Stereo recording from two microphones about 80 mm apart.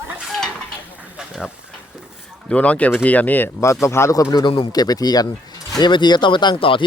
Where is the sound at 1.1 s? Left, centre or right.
Centre.